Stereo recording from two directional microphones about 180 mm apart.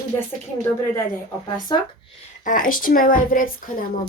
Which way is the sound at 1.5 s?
25° left (ahead or behind).